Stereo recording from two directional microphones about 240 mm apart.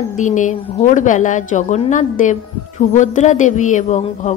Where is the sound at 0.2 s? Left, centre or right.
Left.